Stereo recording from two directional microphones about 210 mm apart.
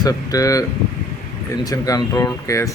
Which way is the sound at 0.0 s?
15° left (ahead or behind).